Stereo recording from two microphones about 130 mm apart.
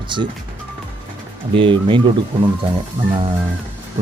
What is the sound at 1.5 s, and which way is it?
Speech, 40° right (ahead or behind).